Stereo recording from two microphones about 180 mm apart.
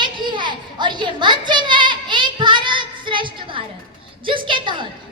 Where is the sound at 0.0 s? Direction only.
25° right (ahead or behind).